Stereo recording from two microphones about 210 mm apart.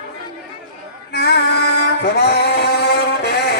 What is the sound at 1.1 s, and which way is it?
Music, 50° left (ahead or behind).